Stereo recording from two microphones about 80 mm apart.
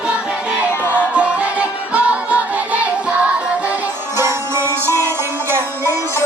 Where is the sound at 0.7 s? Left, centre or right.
Left.